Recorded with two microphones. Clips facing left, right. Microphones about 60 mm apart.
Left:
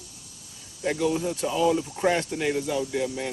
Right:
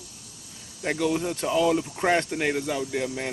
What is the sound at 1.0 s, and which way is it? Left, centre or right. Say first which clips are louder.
Speech: right 1 dB; right.